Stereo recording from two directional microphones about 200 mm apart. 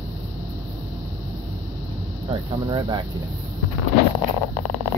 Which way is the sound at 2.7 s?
20° right (ahead or behind).